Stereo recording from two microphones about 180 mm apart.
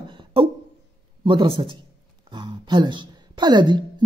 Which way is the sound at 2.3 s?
25° right (ahead or behind).